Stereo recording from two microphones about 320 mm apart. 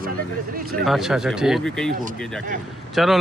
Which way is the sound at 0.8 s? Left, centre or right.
Centre.